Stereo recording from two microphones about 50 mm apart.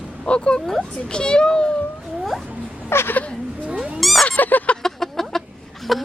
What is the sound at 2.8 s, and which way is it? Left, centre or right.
Speech, left.